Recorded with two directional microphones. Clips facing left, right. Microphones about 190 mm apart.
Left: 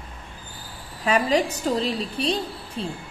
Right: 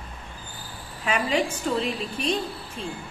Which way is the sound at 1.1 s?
40° left (ahead or behind).